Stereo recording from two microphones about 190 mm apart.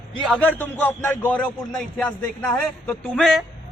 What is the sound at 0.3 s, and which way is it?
A man's voice, 10° left (ahead or behind).